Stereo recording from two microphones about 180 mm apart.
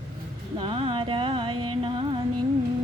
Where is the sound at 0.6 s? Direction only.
30° right (ahead or behind).